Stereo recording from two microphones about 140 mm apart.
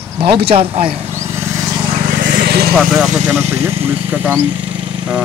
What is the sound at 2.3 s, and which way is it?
Vehicle, 90° right.